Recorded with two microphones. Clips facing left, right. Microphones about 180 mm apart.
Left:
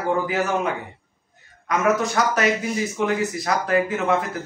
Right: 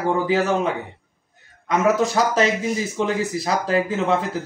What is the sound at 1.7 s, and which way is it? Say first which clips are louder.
A man's voice: right 2 dB; 30° right (ahead or behind).